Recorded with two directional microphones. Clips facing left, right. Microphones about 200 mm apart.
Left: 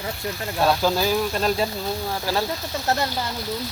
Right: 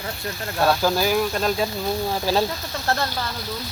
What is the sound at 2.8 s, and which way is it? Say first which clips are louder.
Speech: even; 15° left (ahead or behind).